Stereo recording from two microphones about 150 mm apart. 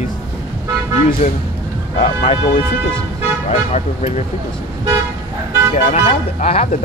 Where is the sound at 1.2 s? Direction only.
45° left (ahead or behind).